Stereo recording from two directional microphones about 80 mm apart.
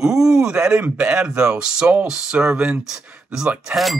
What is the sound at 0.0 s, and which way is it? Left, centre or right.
Speech, centre.